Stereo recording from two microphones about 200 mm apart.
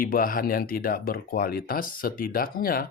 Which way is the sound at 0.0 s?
45° left (ahead or behind).